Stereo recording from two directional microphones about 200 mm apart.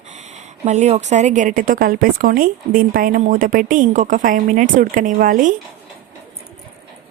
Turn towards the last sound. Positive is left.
turn(degrees=-40)  # may be behind; listen again after turning